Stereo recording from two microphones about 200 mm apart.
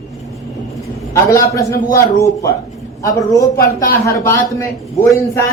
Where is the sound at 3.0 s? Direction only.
15° left (ahead or behind).